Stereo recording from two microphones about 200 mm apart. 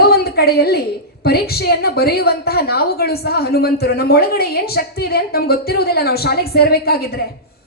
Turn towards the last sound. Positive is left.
turn(degrees=50)  # may be behind; listen again after turning